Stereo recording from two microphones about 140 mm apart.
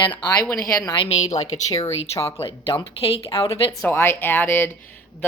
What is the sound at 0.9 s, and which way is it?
Speech, 35° left (ahead or behind).